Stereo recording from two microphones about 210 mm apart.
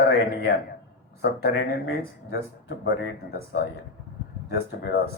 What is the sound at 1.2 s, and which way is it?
Speech, 50° left (ahead or behind).